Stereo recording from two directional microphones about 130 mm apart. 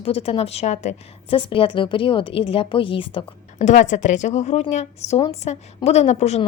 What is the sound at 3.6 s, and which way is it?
Speech, 65° left (ahead or behind).